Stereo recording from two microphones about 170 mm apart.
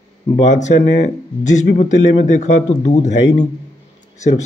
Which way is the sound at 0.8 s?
85° left.